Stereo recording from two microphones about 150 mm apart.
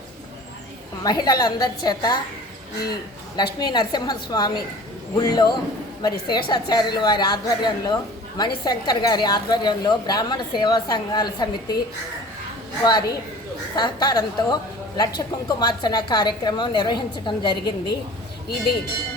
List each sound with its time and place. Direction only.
1.0 s a woman's voice: 25° left (ahead or behind)
3.3 s a woman's voice: 30° left (ahead or behind)
12.8 s a woman's voice: 30° left (ahead or behind)